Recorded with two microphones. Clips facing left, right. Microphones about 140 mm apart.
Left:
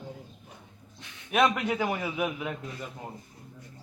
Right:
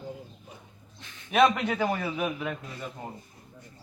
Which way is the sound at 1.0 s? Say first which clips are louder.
Even; 15° left (ahead or behind).